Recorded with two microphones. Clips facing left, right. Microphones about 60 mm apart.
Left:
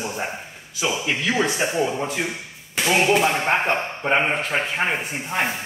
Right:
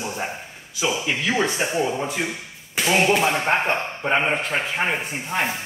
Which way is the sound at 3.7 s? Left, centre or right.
Centre.